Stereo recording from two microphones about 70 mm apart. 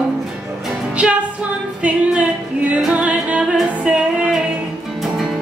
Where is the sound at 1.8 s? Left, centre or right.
Centre.